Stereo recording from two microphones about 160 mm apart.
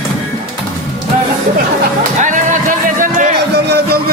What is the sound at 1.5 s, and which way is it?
Chatter, 60° right (ahead or behind).